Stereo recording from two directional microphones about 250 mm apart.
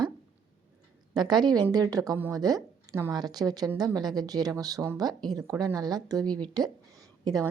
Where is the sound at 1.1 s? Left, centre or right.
Centre.